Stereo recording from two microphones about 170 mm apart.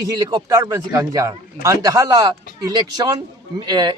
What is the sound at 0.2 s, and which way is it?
Speech, 25° right (ahead or behind).